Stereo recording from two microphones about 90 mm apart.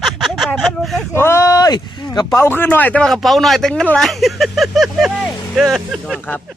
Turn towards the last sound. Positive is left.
turn(degrees=0)  # may be behind; listen again after turning